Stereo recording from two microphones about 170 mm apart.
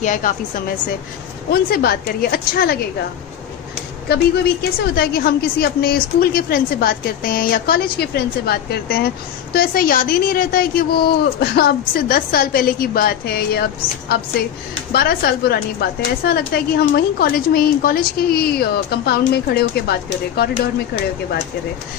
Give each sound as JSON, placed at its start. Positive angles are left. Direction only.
{"t": 0.0, "sound": "speech", "side_deg": 50}
{"t": 1.5, "sound": "a woman's voice", "side_deg": 65}
{"t": 4.1, "sound": "a woman's voice", "side_deg": 70}
{"t": 14.9, "sound": "a woman's voice", "side_deg": 65}